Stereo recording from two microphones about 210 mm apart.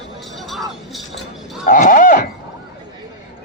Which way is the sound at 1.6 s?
40° left (ahead or behind).